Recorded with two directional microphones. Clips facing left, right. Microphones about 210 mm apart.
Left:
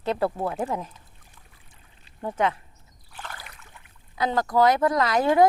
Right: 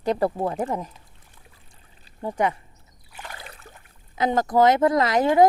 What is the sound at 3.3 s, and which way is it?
Boat, 30° right (ahead or behind).